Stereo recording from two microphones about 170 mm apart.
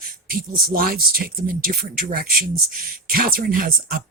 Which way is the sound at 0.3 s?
60° right (ahead or behind).